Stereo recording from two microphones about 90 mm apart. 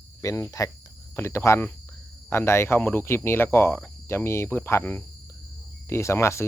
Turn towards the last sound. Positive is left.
turn(degrees=30)  # may be behind; listen again after turning